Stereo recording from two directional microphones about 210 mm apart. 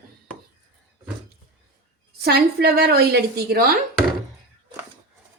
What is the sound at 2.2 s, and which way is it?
A woman's voice, 50° right (ahead or behind).